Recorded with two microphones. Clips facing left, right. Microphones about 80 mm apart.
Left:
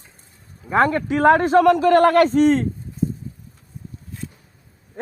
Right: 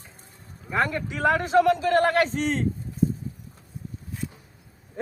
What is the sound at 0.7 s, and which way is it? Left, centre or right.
A man's voice, left.